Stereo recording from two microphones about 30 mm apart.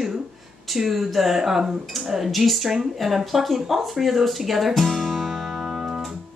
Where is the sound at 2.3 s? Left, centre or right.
Centre.